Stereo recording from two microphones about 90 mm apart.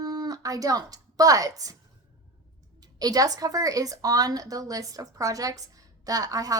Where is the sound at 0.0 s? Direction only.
45° right (ahead or behind).